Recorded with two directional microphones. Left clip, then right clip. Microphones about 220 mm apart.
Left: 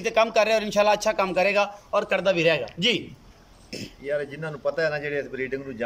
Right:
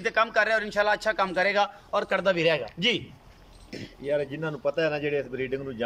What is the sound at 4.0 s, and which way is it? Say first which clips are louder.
A man's voice: right 1 dB; 10° right (ahead or behind).